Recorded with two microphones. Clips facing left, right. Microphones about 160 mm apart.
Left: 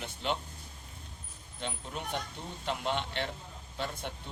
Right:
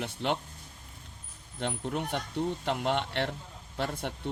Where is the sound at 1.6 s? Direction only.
60° right (ahead or behind).